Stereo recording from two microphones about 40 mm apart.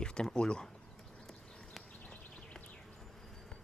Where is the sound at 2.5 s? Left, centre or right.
Left.